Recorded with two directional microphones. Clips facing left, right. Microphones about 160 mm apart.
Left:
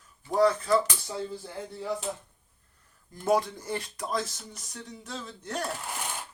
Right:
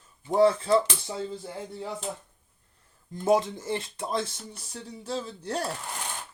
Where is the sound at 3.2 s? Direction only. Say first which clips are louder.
Right 2 dB; 25° right (ahead or behind).